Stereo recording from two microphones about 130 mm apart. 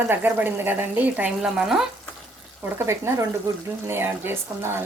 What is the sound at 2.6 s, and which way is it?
Speech, 20° right (ahead or behind).